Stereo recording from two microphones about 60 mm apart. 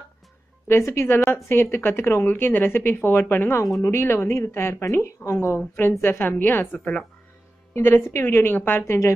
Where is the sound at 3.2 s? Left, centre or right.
Left.